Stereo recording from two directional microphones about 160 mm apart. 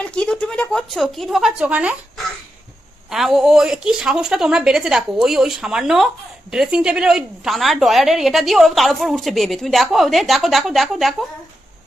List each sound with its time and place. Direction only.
0.0 s a woman's voice: 5° left (ahead or behind)